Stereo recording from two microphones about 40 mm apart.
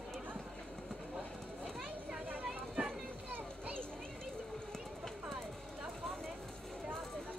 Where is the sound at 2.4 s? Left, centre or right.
Centre.